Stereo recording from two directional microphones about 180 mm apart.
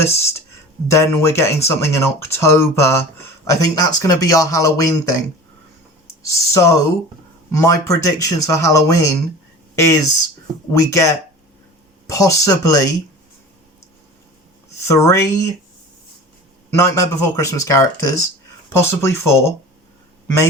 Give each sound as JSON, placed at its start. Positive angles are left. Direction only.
{"t": 0.0, "sound": "speech", "side_deg": 15}
{"t": 6.2, "sound": "speech", "side_deg": 15}
{"t": 10.7, "sound": "speech", "side_deg": 15}
{"t": 14.8, "sound": "speech", "side_deg": 15}
{"t": 16.7, "sound": "speech", "side_deg": 15}